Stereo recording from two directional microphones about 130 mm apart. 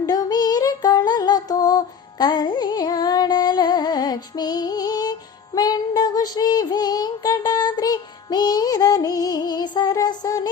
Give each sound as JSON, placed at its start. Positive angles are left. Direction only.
{"t": 0.0, "sound": "female singing", "side_deg": 30}
{"t": 5.5, "sound": "child singing", "side_deg": 30}